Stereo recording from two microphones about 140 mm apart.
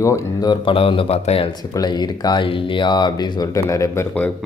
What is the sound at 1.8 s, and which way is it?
Speech, 30° left (ahead or behind).